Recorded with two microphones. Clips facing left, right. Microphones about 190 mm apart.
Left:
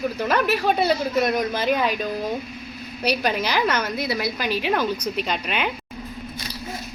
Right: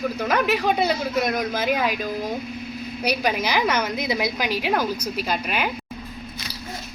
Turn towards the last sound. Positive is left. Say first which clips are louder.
# even
turn(degrees=-5)  # may be behind; listen again after turning